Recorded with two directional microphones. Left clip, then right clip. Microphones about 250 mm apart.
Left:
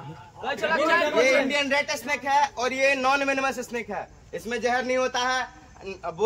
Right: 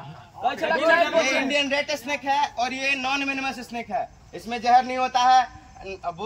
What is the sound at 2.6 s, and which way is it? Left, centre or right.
Speech, centre.